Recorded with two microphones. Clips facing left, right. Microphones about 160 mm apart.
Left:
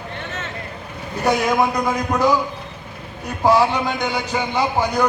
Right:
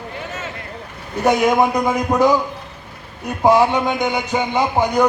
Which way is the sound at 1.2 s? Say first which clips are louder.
Right 3 dB; 20° right (ahead or behind).